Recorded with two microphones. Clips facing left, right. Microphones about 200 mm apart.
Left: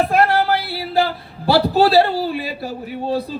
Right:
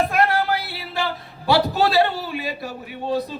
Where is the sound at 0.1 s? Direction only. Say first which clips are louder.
Left 4 dB; 30° left (ahead or behind).